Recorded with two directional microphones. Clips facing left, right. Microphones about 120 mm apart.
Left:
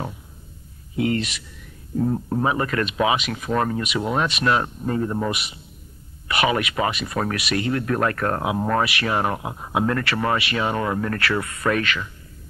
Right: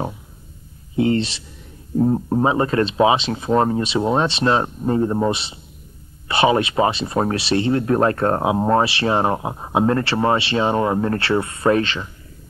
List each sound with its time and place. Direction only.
0.9 s speech: 30° right (ahead or behind)